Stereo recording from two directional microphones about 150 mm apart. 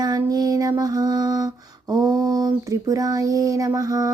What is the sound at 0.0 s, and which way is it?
Music, 25° right (ahead or behind).